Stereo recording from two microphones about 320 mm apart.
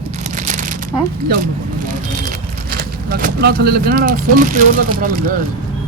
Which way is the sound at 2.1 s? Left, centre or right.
Right.